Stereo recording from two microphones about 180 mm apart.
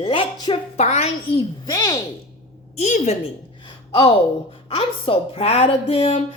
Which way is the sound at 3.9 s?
25° left (ahead or behind).